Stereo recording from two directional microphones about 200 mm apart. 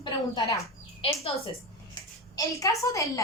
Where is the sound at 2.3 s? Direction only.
15° left (ahead or behind).